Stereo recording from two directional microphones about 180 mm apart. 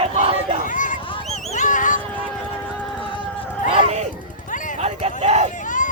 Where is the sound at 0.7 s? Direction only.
45° left (ahead or behind).